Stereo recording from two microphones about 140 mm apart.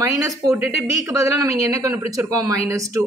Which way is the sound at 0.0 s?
25° right (ahead or behind).